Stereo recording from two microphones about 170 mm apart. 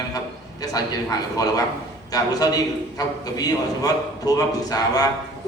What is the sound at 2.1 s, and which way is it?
A man's voice, 20° left (ahead or behind).